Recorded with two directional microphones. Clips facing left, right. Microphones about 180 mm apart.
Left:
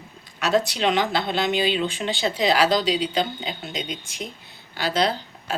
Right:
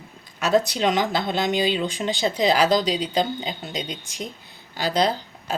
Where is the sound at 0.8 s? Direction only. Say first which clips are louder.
Even; 45° right (ahead or behind).